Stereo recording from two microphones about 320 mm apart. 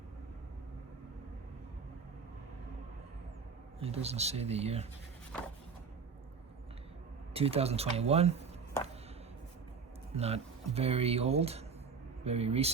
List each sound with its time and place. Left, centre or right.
3.8 s speech: centre
7.3 s speech: centre
10.2 s speech: centre